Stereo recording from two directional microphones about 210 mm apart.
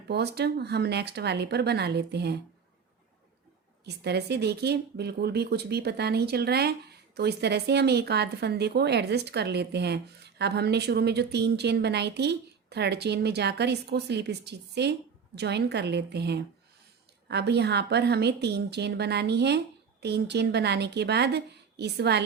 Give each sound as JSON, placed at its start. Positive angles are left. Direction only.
{"t": 0.1, "sound": "speech", "side_deg": -50}
{"t": 3.8, "sound": "speech", "side_deg": -50}